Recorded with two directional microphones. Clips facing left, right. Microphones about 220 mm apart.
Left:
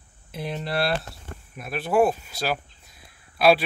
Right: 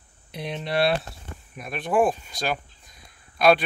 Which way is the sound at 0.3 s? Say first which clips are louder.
Even; centre (ahead or behind).